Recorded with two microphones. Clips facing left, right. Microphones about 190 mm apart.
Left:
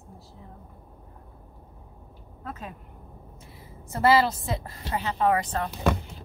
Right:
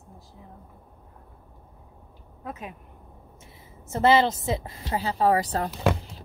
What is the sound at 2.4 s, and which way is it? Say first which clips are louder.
A woman's voice: right 1 dB; 15° right (ahead or behind).